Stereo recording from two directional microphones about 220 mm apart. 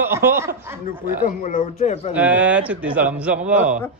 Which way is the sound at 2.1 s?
5° right (ahead or behind).